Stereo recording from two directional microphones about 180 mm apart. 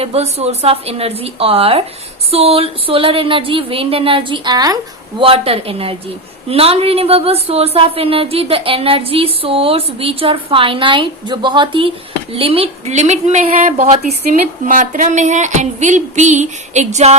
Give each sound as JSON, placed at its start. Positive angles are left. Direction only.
{"t": 0.0, "sound": "speech", "side_deg": -35}